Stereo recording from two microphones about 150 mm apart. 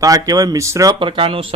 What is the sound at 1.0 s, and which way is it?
Speech, 35° right (ahead or behind).